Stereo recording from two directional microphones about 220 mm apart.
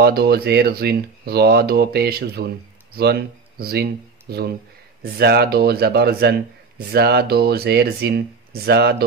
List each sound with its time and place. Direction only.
0.0 s speech: 45° right (ahead or behind)